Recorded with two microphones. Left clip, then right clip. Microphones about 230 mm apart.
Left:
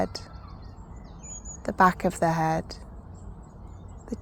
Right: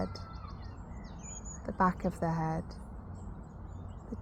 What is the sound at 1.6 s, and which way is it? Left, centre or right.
Speech, left.